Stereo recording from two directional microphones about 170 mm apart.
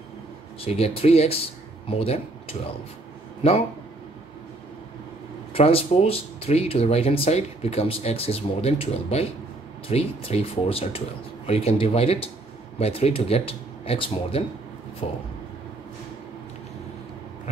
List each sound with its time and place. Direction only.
0.6 s speech: 35° left (ahead or behind)
5.5 s speech: 35° left (ahead or behind)